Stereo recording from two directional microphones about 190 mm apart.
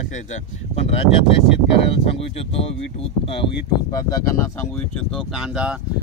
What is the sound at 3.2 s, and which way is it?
Speech, 30° left (ahead or behind).